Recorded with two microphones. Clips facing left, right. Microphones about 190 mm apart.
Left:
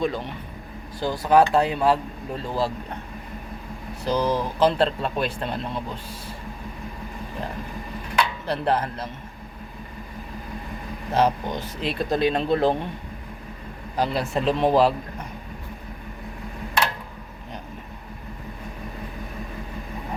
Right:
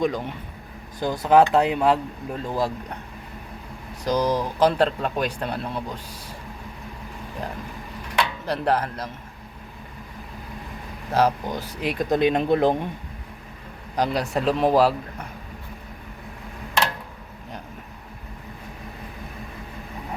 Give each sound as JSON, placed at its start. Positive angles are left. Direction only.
{"t": 0.0, "sound": "speech", "side_deg": -15}
{"t": 4.0, "sound": "speech", "side_deg": -15}
{"t": 8.4, "sound": "speech", "side_deg": -10}
{"t": 11.1, "sound": "speech", "side_deg": -10}
{"t": 13.9, "sound": "speech", "side_deg": -15}